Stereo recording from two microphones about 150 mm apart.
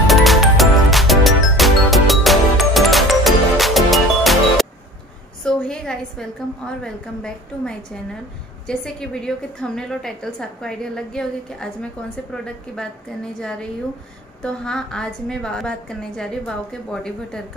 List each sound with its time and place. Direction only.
0.0 s music: centre (ahead or behind)
5.4 s a sound: 5° left (ahead or behind)
6.8 s a woman's voice: 5° left (ahead or behind)